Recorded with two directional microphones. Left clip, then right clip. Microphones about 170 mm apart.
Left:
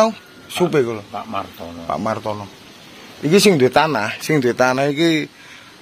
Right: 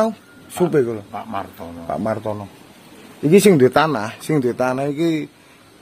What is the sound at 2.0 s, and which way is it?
Speech, 35° right (ahead or behind).